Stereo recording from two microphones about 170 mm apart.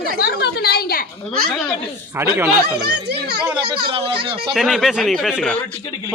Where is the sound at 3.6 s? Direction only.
30° right (ahead or behind).